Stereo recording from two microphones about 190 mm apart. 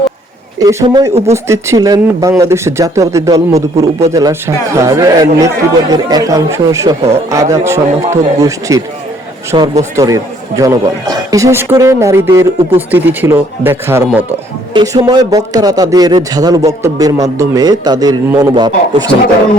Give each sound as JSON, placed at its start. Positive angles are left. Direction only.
{"t": 0.6, "sound": "a man's voice", "side_deg": -15}
{"t": 14.7, "sound": "a man's voice", "side_deg": -20}